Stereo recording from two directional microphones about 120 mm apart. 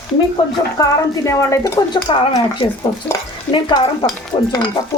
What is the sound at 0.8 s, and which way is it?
A woman's voice, 25° left (ahead or behind).